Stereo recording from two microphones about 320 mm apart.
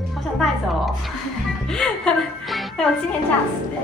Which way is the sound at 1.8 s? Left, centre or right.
Centre.